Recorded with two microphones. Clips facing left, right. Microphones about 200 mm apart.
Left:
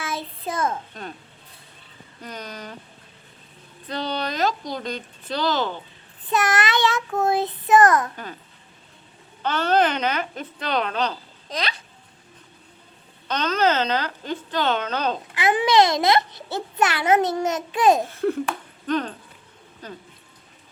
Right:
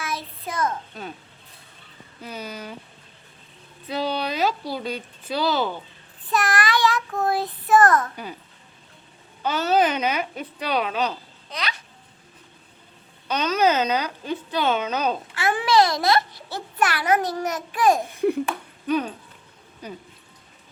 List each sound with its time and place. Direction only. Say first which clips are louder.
0.0 s child singing: left 2 dB; 25° left (ahead or behind)
2.2 s speech: right 1 dB; 5° right (ahead or behind)
3.8 s speech: right 2 dB; 5° right (ahead or behind)
6.3 s a child's voice: left 1 dB; 20° left (ahead or behind)
8.1 s speech: right 1 dB; 10° right (ahead or behind)
9.4 s speech: even; 10° right (ahead or behind)
11.4 s babbling: left 3 dB; 35° left (ahead or behind)
13.2 s speech: right 1 dB; 10° right (ahead or behind)
15.4 s a child's voice: left 2 dB; 20° left (ahead or behind)
18.1 s speech: right 1 dB; 15° right (ahead or behind)